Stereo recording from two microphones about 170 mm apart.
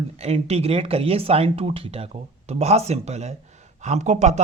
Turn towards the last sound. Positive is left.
turn(degrees=-45)  # may be behind; listen again after turning